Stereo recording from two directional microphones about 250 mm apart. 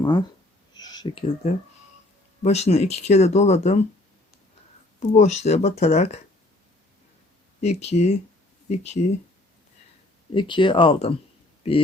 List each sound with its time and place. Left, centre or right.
0.0 s speech: centre
0.7 s a sound: centre
1.4 s speech: left
4.9 s speech: left
7.6 s speech: left
10.3 s speech: centre